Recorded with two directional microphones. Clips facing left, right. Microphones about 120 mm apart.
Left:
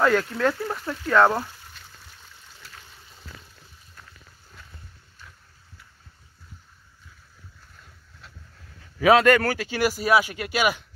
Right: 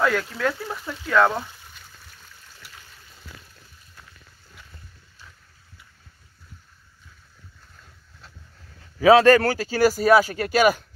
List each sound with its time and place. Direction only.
0.0 s speech: centre (ahead or behind)
9.0 s speech: 30° right (ahead or behind)